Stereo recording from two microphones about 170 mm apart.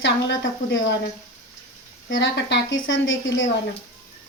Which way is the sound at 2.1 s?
90° left.